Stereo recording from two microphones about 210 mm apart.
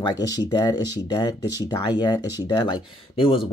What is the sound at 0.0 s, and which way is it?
Speech, 20° left (ahead or behind).